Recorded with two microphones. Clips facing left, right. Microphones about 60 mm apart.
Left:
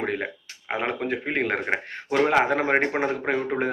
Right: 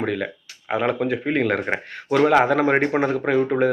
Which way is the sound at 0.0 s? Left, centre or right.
Left.